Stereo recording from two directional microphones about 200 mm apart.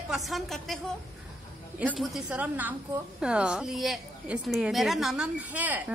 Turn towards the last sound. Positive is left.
turn(degrees=-10)  # may be behind; listen again after turning